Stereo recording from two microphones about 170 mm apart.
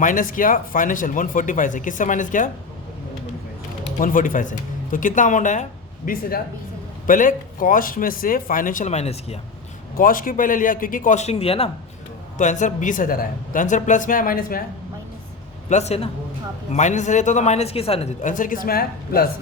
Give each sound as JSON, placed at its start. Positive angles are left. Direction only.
{"t": 0.0, "sound": "speech", "side_deg": 50}
{"t": 4.0, "sound": "speech", "side_deg": 55}
{"t": 6.1, "sound": "speech", "side_deg": 60}
{"t": 10.0, "sound": "speech", "side_deg": 55}
{"t": 12.4, "sound": "speech", "side_deg": 45}
{"t": 15.7, "sound": "a man's voice", "side_deg": 40}